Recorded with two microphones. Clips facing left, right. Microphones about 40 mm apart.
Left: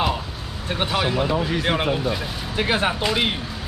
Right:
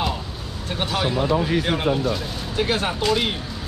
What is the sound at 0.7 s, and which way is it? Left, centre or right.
Speech, centre.